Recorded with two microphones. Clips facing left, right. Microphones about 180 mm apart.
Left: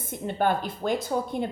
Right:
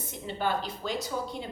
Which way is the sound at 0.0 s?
55° left (ahead or behind).